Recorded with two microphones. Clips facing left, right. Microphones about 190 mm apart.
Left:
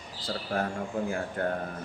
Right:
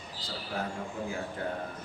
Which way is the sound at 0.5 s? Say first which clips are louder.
Left 5 dB; 50° left (ahead or behind).